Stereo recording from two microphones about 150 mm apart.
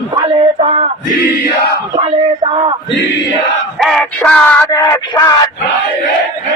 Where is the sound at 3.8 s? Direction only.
5° left (ahead or behind).